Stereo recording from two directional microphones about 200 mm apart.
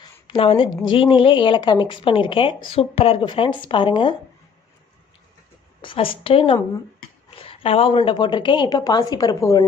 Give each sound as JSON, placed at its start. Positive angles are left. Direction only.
{"t": 0.0, "sound": "a sound", "side_deg": 25}
{"t": 0.9, "sound": "speech", "side_deg": 25}
{"t": 5.8, "sound": "speech", "side_deg": 25}